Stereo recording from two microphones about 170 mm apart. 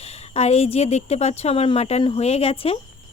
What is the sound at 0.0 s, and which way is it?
Speech, 40° left (ahead or behind).